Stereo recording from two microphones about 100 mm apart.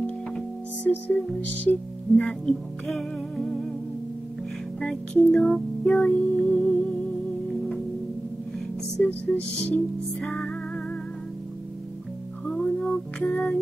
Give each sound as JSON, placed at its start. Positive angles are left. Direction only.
{"t": 0.8, "sound": "music", "side_deg": 15}
{"t": 2.1, "sound": "music", "side_deg": 5}
{"t": 4.7, "sound": "music", "side_deg": 5}
{"t": 8.9, "sound": "music", "side_deg": 10}
{"t": 12.4, "sound": "music", "side_deg": 10}